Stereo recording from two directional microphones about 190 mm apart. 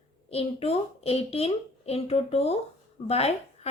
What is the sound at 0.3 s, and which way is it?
A woman's voice, 30° left (ahead or behind).